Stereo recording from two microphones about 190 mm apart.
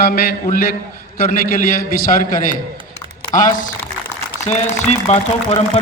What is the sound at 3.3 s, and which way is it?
A man's voice, 45° left (ahead or behind).